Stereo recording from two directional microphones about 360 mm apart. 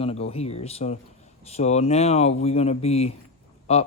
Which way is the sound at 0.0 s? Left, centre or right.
Centre.